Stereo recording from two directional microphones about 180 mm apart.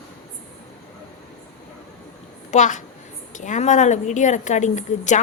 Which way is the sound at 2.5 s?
40° left (ahead or behind).